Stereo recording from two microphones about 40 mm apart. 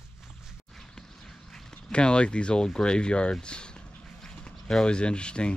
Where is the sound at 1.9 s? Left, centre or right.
Left.